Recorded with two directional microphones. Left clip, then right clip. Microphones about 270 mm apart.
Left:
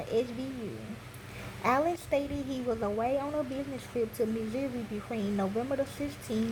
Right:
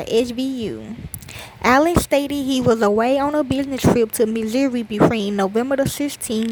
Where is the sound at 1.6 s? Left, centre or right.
Right.